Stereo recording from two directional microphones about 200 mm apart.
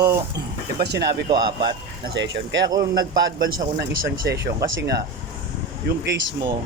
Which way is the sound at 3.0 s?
50° right (ahead or behind).